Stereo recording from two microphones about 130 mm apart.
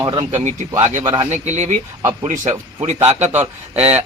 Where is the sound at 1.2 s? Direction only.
60° right (ahead or behind).